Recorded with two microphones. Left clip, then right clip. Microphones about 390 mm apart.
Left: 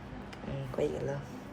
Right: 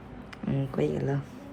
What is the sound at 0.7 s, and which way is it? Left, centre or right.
Speech, centre.